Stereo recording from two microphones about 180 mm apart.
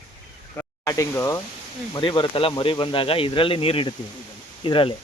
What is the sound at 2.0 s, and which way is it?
Speech, 25° left (ahead or behind).